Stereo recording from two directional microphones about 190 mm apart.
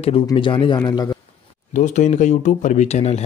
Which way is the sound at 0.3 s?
25° left (ahead or behind).